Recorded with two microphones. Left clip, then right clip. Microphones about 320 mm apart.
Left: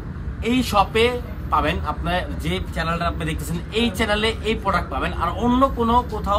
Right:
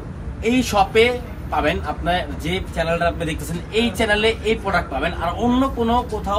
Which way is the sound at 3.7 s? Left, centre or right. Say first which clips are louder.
Right 3 dB; centre.